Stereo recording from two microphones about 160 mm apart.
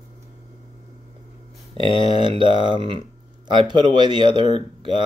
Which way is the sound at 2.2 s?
30° right (ahead or behind).